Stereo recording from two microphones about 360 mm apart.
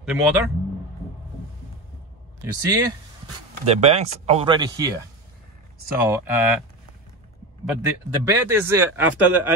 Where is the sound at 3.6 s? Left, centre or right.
Centre.